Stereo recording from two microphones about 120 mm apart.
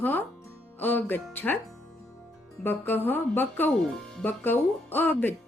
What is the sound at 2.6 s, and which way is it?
Speech, 15° left (ahead or behind).